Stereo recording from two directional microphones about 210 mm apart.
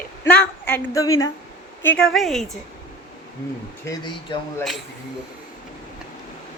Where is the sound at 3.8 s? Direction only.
15° left (ahead or behind).